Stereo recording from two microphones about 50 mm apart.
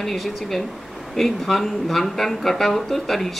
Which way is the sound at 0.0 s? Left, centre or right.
Centre.